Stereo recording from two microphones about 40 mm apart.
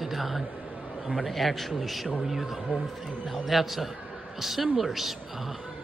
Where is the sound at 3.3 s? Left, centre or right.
Centre.